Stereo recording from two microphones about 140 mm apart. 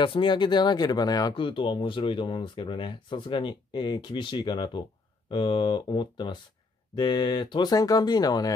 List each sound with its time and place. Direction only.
0.0 s speech: 35° left (ahead or behind)